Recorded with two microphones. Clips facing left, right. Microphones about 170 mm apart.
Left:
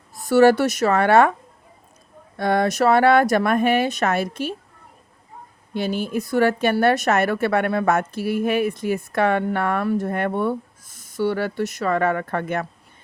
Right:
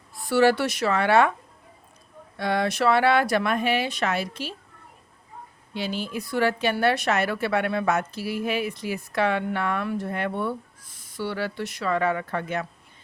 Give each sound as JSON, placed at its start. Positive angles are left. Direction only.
{"t": 0.1, "sound": "a woman's voice", "side_deg": 45}
{"t": 2.4, "sound": "a woman's voice", "side_deg": 50}
{"t": 5.7, "sound": "a woman's voice", "side_deg": 50}